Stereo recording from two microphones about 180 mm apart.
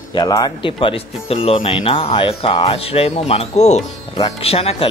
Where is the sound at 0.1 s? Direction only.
25° left (ahead or behind).